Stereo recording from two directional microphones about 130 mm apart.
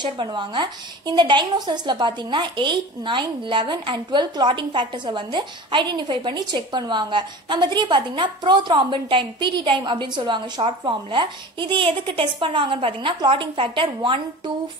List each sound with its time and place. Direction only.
0.0 s a woman's voice: 35° right (ahead or behind)